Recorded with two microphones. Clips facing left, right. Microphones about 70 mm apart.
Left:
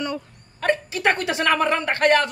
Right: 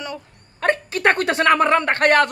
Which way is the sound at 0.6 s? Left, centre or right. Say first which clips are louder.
Right 2 dB; right.